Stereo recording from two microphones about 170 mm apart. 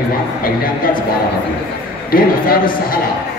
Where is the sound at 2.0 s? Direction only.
60° left (ahead or behind).